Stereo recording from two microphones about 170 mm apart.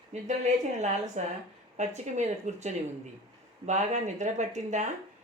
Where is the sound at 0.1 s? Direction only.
45° right (ahead or behind).